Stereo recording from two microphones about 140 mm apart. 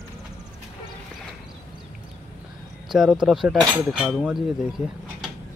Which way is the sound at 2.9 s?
5° right (ahead or behind).